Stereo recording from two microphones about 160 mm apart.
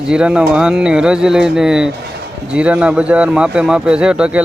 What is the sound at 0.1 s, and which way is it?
A man's voice, 5° right (ahead or behind).